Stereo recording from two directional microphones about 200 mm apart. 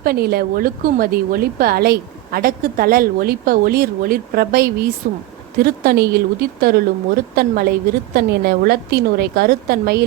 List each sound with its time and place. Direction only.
0.0 s a woman's voice: 50° right (ahead or behind)